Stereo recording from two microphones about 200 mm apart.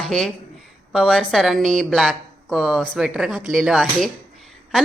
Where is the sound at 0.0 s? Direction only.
Centre (ahead or behind).